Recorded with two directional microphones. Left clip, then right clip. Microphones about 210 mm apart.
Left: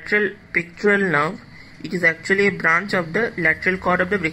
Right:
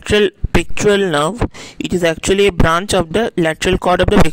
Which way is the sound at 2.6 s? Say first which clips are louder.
Right 4 dB; 40° right (ahead or behind).